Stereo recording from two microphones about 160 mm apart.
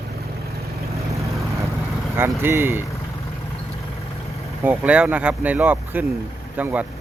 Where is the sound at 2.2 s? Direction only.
15° right (ahead or behind).